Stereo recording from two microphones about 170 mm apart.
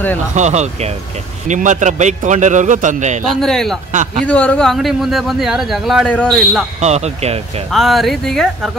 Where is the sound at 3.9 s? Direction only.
45° right (ahead or behind).